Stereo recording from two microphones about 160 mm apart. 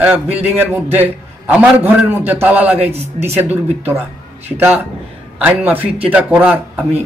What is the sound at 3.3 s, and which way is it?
A man's voice, 10° right (ahead or behind).